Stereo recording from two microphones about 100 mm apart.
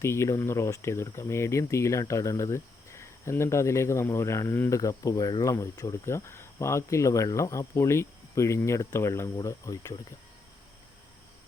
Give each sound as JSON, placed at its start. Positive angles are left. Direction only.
{"t": 0.0, "sound": "speech", "side_deg": 25}
{"t": 4.8, "sound": "speech", "side_deg": 35}